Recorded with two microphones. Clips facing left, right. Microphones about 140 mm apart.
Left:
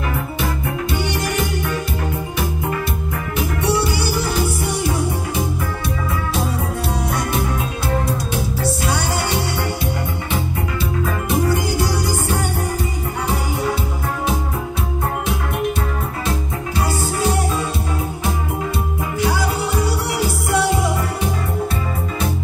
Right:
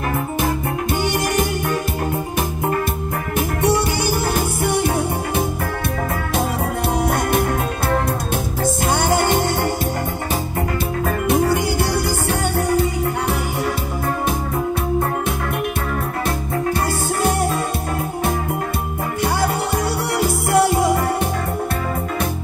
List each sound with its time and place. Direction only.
1.0 s music: 45° right (ahead or behind)
3.3 s music: 50° right (ahead or behind)
7.0 s music: 55° right (ahead or behind)
8.8 s music: 50° right (ahead or behind)
11.1 s music: 60° right (ahead or behind)
19.2 s music: 55° right (ahead or behind)